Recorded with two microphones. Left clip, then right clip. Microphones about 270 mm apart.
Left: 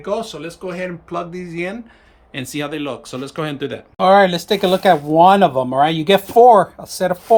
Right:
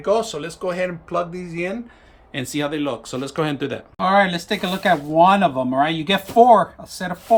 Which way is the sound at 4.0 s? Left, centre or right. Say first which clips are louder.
Left 6 dB; left.